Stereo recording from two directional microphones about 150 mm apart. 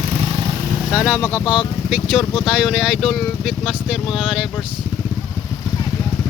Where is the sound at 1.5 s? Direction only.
5° right (ahead or behind).